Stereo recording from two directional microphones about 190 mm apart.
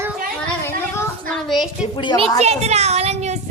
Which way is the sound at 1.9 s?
25° left (ahead or behind).